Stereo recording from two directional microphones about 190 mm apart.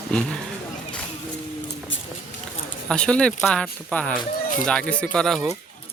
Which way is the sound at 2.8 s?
5° left (ahead or behind).